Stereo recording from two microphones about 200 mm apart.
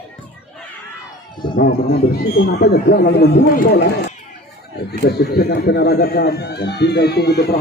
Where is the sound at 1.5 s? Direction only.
45° left (ahead or behind).